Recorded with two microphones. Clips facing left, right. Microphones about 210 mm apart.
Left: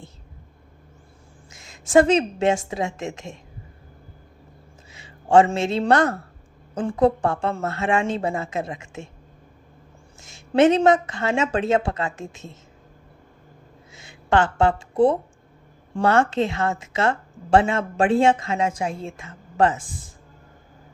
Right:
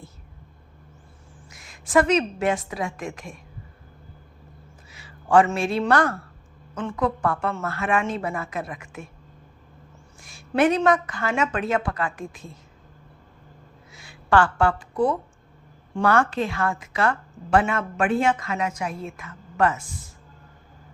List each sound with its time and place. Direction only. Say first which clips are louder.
1.5 s a sound: left 3 dB; 25° left (ahead or behind)
1.9 s a woman's voice: left 3 dB; 25° left (ahead or behind)
4.9 s a man's voice: left 2 dB; 25° left (ahead or behind)
10.2 s a woman's voice: left 4 dB; 25° left (ahead or behind)
13.9 s a woman's voice: even; 20° left (ahead or behind)